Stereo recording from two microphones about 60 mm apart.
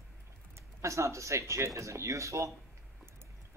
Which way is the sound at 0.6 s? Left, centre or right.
Right.